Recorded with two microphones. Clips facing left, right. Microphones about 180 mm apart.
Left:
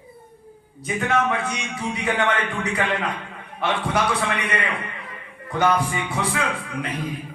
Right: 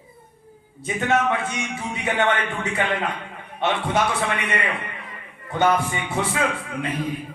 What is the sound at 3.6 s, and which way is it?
Speech, 25° right (ahead or behind).